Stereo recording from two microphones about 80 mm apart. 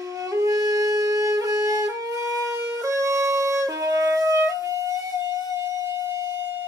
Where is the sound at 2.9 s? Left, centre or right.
Right.